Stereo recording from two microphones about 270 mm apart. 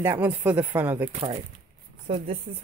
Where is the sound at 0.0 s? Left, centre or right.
Centre.